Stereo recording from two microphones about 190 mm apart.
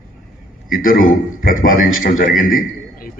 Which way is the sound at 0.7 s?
45° left (ahead or behind).